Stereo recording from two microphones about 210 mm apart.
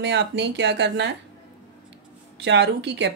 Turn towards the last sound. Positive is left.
turn(degrees=-55)  # may be behind; listen again after turning